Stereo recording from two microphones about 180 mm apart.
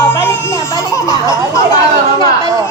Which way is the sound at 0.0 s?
10° left (ahead or behind).